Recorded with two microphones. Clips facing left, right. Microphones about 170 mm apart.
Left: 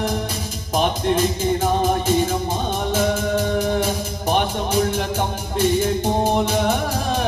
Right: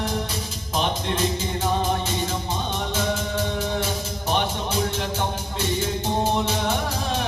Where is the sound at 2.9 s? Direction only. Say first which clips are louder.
Left 6 dB; 50° left (ahead or behind).